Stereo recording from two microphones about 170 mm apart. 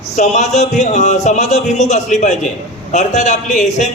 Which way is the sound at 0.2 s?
40° left (ahead or behind).